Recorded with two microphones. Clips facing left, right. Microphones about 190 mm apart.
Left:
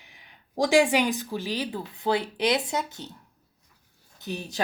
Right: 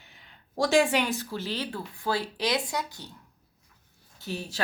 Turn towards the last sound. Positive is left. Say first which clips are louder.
# left 3 dB
turn(degrees=20)  # may be behind; listen again after turning